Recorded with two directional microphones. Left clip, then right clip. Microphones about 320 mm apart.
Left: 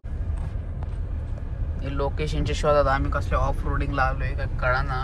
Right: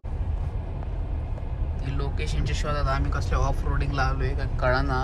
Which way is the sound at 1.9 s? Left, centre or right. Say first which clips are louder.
Left 7 dB; centre.